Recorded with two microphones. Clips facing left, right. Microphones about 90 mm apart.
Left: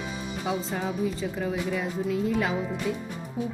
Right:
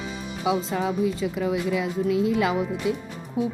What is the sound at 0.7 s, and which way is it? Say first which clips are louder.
Speech: right 4 dB; 75° right (ahead or behind).